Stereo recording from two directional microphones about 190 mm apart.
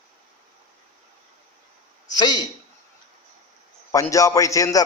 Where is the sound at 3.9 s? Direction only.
15° left (ahead or behind).